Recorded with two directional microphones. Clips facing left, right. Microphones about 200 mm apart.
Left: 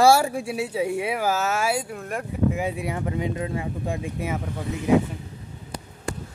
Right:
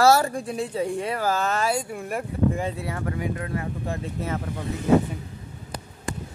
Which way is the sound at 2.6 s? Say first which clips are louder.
Left 2 dB; 15° left (ahead or behind).